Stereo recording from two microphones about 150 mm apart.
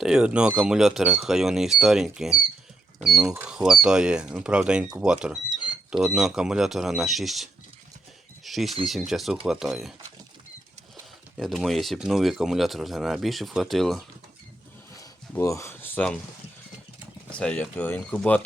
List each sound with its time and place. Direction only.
0.0 s speech: 5° right (ahead or behind)
11.3 s speech: centre (ahead or behind)
14.9 s a sound: 20° left (ahead or behind)
17.4 s speech: 10° left (ahead or behind)